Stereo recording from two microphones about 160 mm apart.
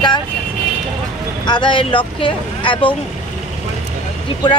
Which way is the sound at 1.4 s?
30° left (ahead or behind).